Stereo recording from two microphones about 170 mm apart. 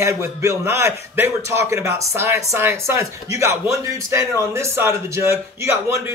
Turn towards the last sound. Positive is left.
turn(degrees=-15)  # may be behind; listen again after turning